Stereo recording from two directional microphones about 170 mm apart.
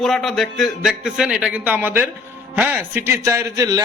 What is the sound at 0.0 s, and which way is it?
A man's voice, centre (ahead or behind).